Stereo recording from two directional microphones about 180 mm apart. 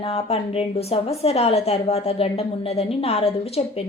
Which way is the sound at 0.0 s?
35° left (ahead or behind).